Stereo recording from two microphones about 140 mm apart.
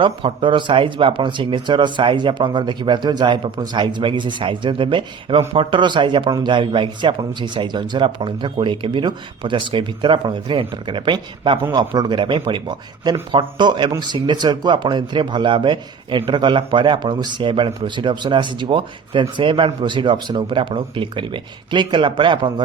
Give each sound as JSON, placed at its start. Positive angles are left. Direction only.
{"t": 0.0, "sound": "speech", "side_deg": -35}